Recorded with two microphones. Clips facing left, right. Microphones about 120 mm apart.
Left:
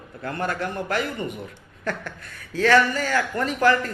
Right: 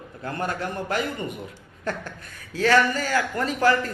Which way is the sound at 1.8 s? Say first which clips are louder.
Left 1 dB; 40° right (ahead or behind).